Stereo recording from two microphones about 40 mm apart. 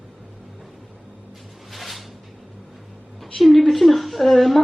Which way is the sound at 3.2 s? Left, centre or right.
Centre.